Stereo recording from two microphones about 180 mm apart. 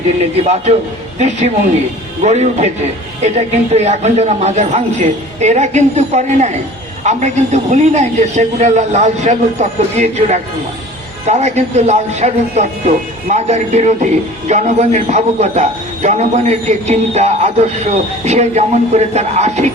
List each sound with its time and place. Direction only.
1.2 s a man's voice: 40° right (ahead or behind)